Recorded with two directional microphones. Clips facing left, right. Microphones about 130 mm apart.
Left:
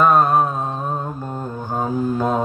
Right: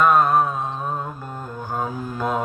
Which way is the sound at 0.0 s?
40° left (ahead or behind).